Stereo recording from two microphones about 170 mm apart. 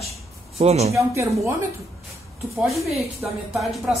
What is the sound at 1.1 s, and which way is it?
Speech, 15° right (ahead or behind).